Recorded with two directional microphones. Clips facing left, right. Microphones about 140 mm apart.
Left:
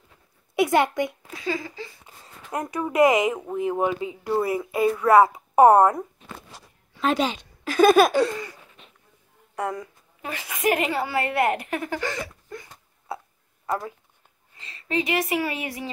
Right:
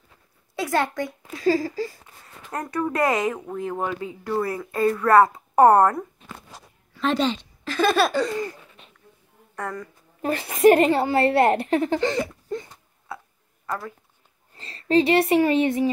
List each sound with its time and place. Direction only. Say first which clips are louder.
0.6 s a child's voice: left 4 dB; 20° left (ahead or behind)
1.4 s a woman's voice: right 8 dB; 40° right (ahead or behind)
2.2 s speech: left 2 dB; 15° left (ahead or behind)
9.6 s speech: left 3 dB; 15° left (ahead or behind)
10.2 s a woman's voice: right 9 dB; 35° right (ahead or behind)
13.7 s speech: left 3 dB; 20° left (ahead or behind)
14.6 s a woman's voice: right 8 dB; 30° right (ahead or behind)